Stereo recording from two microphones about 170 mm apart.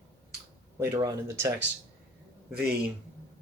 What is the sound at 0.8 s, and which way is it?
Speech, 20° right (ahead or behind).